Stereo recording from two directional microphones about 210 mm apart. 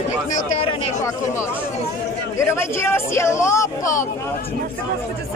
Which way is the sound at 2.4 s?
10° left (ahead or behind).